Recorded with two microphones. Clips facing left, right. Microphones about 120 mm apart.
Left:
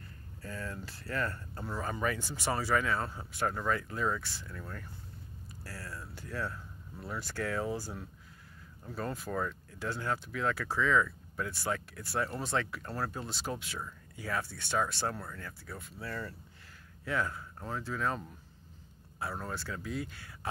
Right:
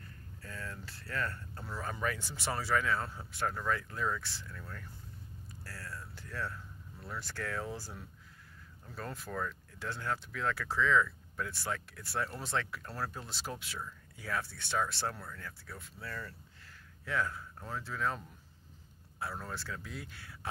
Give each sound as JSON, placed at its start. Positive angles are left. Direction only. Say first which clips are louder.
{"t": 0.4, "sound": "a sound", "louder": "left 4 dB", "side_deg": 10}
{"t": 1.8, "sound": "speech", "louder": "left 3 dB", "side_deg": 5}
{"t": 4.5, "sound": "speech", "louder": "left 3 dB", "side_deg": 15}
{"t": 5.6, "sound": "a sound", "louder": "left 2 dB", "side_deg": 5}
{"t": 7.1, "sound": "speech", "louder": "left 4 dB", "side_deg": 5}
{"t": 9.3, "sound": "speech", "louder": "left 2 dB", "side_deg": 15}
{"t": 9.8, "sound": "speech", "louder": "left 3 dB", "side_deg": 5}
{"t": 19.4, "sound": "speech", "louder": "left 3 dB", "side_deg": 0}